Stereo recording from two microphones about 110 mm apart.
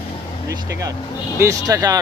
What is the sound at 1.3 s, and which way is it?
Speech, 30° right (ahead or behind).